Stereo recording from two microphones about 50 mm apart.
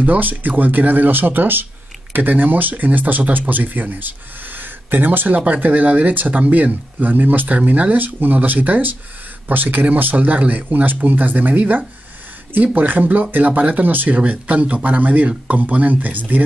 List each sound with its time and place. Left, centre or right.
0.0 s speech: right